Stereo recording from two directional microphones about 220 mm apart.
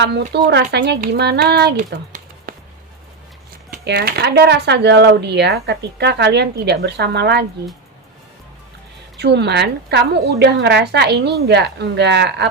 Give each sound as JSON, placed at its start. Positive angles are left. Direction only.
{"t": 0.0, "sound": "speech", "side_deg": -50}
{"t": 2.5, "sound": "a sound", "side_deg": -40}
{"t": 3.8, "sound": "speech", "side_deg": -45}
{"t": 9.1, "sound": "speech", "side_deg": -50}